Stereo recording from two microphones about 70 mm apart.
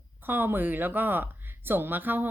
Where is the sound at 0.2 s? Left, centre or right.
Right.